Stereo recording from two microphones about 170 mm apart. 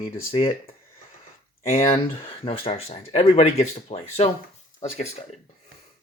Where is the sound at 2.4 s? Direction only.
35° left (ahead or behind).